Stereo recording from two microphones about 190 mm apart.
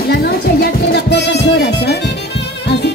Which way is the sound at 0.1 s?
60° left (ahead or behind).